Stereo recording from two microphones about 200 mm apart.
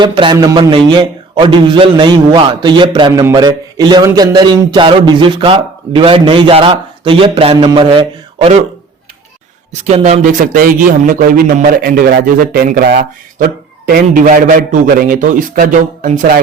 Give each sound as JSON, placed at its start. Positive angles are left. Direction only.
{"t": 0.0, "sound": "speech", "side_deg": -25}
{"t": 9.8, "sound": "a man's voice", "side_deg": -35}